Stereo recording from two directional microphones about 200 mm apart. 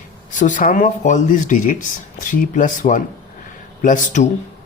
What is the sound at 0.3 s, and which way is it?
Speech, 40° left (ahead or behind).